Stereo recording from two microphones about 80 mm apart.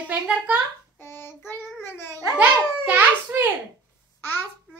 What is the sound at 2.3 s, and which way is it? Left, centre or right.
A child's voice, centre.